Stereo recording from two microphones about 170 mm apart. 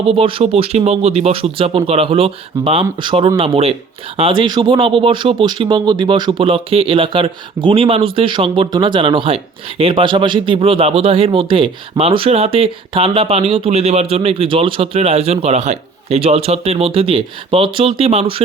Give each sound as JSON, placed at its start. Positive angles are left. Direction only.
{"t": 0.1, "sound": "speech", "side_deg": -35}